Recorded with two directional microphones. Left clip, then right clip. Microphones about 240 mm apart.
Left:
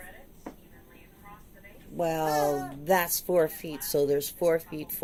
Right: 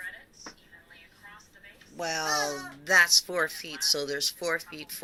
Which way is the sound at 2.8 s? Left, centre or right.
Centre.